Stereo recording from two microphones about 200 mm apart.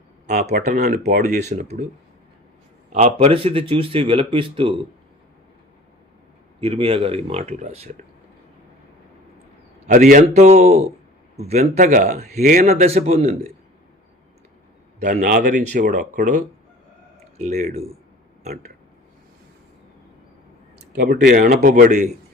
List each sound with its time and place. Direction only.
0.3 s speech: 35° right (ahead or behind)
0.9 s speech: 50° right (ahead or behind)
1.3 s speech: 35° right (ahead or behind)
2.9 s speech: 35° right (ahead or behind)
6.6 s speech: 30° right (ahead or behind)
9.8 s speech: 35° right (ahead or behind)
12.4 s speech: 45° right (ahead or behind)
12.6 s speech: 35° right (ahead or behind)
15.0 s speech: 45° right (ahead or behind)
21.0 s speech: 55° right (ahead or behind); by 22.1 s 35° right (ahead or behind)